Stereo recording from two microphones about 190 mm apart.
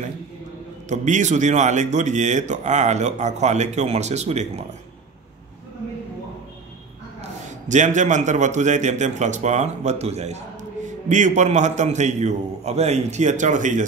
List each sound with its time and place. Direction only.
0.8 s a man's voice: 40° right (ahead or behind)
7.2 s a man's voice: 40° right (ahead or behind)